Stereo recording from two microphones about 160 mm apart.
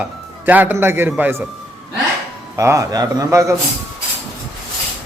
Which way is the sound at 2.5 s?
20° right (ahead or behind).